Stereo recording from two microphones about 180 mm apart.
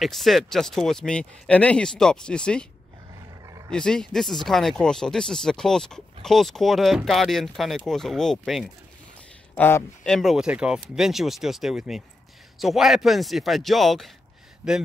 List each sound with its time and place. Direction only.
0.0 s speech: centre (ahead or behind)
3.4 s roaring cats: 20° right (ahead or behind)
3.7 s speech: 5° left (ahead or behind)
9.6 s speech: 10° left (ahead or behind)
10.1 s speech: centre (ahead or behind)